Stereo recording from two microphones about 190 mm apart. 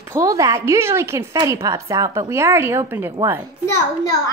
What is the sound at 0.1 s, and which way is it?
A woman's voice, 15° right (ahead or behind).